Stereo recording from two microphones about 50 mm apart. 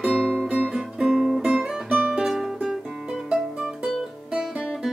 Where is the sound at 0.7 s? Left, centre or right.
Centre.